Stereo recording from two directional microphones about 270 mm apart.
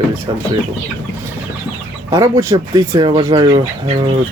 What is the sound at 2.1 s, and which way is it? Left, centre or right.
Speech, centre.